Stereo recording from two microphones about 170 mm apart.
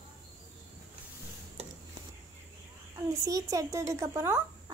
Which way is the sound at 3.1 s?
20° right (ahead or behind).